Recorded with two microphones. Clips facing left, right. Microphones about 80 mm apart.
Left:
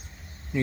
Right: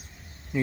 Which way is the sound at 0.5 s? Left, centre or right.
Centre.